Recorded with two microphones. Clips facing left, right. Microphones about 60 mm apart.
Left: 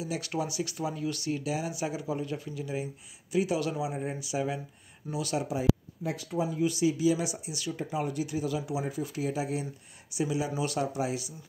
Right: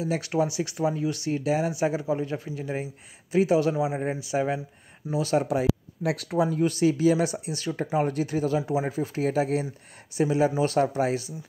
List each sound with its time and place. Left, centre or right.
0.4 s speech: right
5.4 s speech: right